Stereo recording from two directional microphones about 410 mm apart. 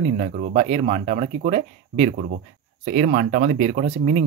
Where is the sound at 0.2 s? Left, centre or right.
Centre.